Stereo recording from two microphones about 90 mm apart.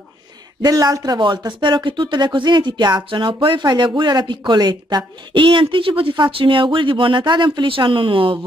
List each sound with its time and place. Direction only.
0.6 s speech: 45° right (ahead or behind); by 8.4 s 75° right (ahead or behind)